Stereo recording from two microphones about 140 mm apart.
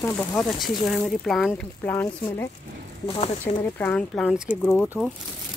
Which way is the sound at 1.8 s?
15° left (ahead or behind).